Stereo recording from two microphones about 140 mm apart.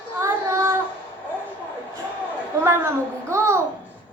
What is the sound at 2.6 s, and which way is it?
Speech, 20° right (ahead or behind).